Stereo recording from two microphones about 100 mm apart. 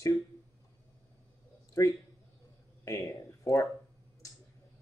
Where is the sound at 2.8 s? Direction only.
30° left (ahead or behind).